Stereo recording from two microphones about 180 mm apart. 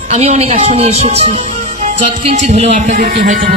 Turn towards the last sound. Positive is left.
turn(degrees=-60)  # may be behind; listen again after turning